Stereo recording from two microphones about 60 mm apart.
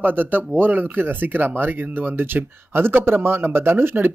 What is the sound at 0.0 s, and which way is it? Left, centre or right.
Speech, right.